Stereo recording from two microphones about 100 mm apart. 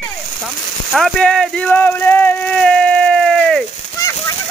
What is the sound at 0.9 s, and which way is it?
Speech, 5° left (ahead or behind).